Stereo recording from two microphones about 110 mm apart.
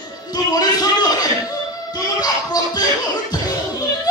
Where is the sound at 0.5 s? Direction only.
35° left (ahead or behind).